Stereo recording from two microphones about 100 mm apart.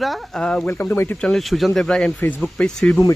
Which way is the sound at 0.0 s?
5° left (ahead or behind).